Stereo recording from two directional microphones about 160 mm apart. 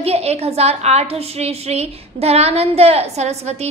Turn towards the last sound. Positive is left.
turn(degrees=-40)  # may be behind; listen again after turning